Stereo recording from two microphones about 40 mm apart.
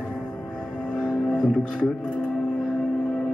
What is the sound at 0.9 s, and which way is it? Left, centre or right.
Music, left.